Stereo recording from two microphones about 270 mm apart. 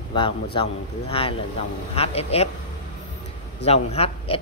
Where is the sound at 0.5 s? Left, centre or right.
Centre.